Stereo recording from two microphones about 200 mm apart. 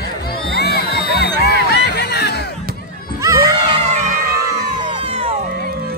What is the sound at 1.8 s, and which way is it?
Music, 55° left (ahead or behind).